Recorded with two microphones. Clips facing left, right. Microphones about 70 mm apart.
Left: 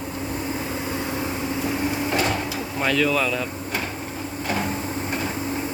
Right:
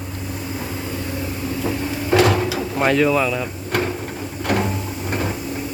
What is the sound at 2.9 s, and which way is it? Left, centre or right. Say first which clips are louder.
Speech: right 4 dB; right.